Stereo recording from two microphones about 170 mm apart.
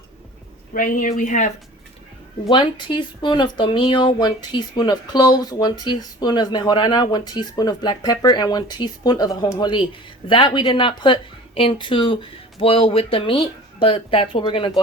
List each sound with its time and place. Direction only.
0.7 s speech: 55° left (ahead or behind)
2.5 s speech: 30° left (ahead or behind)